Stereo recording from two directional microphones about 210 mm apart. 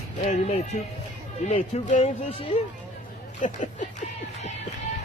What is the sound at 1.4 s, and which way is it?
Speech, 30° left (ahead or behind).